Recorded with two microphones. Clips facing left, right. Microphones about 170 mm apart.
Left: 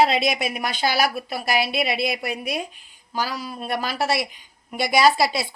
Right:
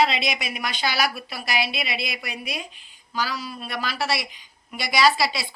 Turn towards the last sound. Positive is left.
turn(degrees=50)  # may be behind; listen again after turning